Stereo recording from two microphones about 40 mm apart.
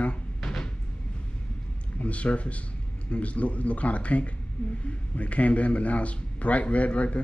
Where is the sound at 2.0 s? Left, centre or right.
Left.